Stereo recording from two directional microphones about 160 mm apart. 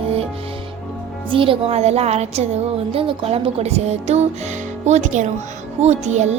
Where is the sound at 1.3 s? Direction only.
35° right (ahead or behind).